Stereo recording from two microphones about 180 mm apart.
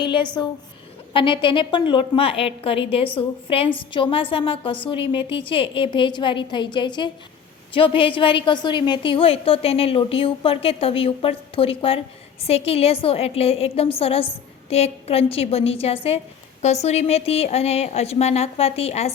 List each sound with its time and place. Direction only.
0.0 s a woman's voice: 25° left (ahead or behind)